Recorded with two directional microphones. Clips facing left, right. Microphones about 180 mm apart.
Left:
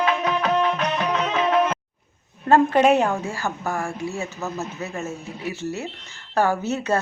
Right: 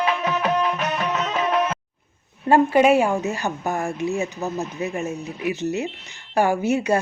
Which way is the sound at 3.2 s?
20° right (ahead or behind).